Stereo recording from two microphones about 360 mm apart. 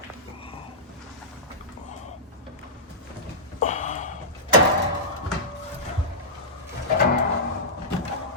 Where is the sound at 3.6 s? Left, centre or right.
Centre.